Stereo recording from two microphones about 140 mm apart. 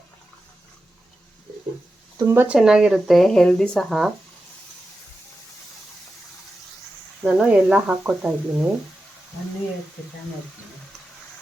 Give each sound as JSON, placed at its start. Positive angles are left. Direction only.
{"t": 2.1, "sound": "speech", "side_deg": -20}
{"t": 2.6, "sound": "speech", "side_deg": -5}
{"t": 7.3, "sound": "speech", "side_deg": -5}